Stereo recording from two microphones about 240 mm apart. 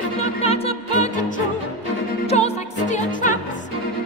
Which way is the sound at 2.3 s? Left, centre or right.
Left.